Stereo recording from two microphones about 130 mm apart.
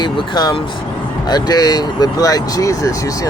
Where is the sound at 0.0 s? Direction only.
35° left (ahead or behind).